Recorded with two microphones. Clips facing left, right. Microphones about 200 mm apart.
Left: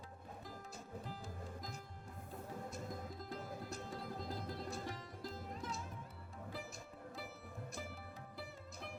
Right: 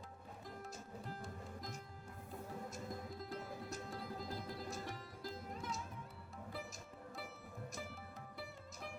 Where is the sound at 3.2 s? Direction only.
Centre (ahead or behind).